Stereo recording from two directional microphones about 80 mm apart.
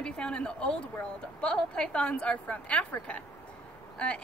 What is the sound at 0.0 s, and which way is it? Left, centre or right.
A woman's voice, centre.